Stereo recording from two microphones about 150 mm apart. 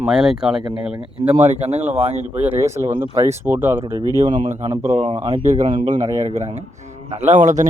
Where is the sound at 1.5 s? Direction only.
45° right (ahead or behind).